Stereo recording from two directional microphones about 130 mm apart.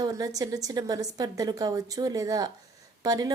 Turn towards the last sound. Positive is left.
turn(degrees=-30)  # may be behind; listen again after turning